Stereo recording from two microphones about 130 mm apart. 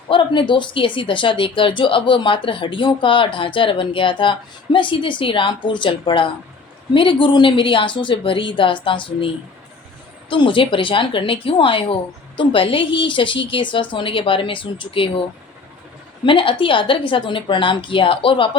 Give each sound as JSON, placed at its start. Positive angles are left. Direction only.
{"t": 0.1, "sound": "speech", "side_deg": 40}
{"t": 16.2, "sound": "speech", "side_deg": 40}